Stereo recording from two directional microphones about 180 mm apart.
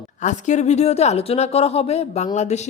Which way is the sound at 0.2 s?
40° left (ahead or behind).